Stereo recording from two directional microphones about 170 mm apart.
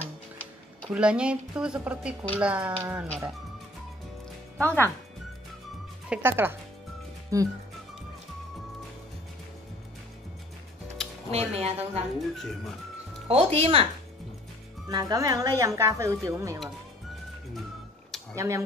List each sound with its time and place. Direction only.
0.4 s speech: 10° right (ahead or behind)
4.6 s speech: 10° left (ahead or behind)
6.0 s a woman's voice: 10° right (ahead or behind)
11.3 s speech: 35° right (ahead or behind)
12.2 s speech: centre (ahead or behind)
13.3 s speech: 35° right (ahead or behind)
14.9 s a woman's voice: 25° right (ahead or behind)
18.3 s speech: 15° right (ahead or behind)